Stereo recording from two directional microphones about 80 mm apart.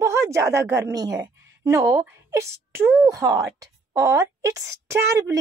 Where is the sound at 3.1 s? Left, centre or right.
Right.